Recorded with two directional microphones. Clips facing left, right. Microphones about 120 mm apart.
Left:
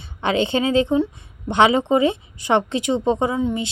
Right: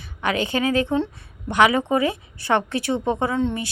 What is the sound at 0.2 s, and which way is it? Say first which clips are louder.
A woman's voice: left 3 dB; 25° left (ahead or behind).